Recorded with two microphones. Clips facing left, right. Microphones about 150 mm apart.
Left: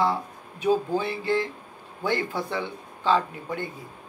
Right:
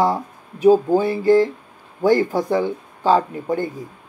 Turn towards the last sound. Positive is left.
turn(degrees=-40)  # may be behind; listen again after turning